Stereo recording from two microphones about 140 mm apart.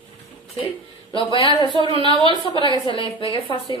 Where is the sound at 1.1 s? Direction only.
35° left (ahead or behind).